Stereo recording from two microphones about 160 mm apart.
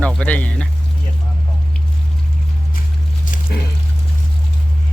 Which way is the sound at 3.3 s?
55° left (ahead or behind).